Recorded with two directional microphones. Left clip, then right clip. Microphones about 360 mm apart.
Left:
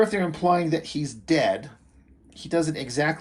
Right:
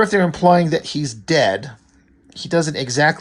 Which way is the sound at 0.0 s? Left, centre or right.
Right.